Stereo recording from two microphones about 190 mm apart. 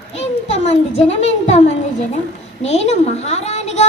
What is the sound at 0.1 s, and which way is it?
A woman's voice, 35° left (ahead or behind).